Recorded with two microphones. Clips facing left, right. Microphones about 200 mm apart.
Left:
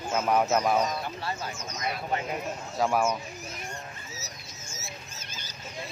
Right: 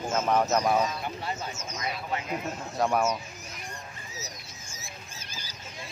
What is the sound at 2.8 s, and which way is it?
Speech, centre (ahead or behind).